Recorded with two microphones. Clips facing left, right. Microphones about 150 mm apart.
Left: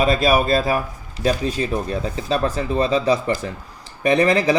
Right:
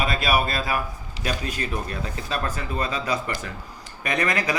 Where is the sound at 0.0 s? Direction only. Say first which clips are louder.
Left 6 dB; 35° left (ahead or behind).